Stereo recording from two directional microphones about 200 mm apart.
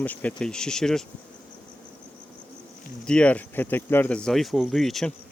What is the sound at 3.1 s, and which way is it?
Speech, 5° left (ahead or behind).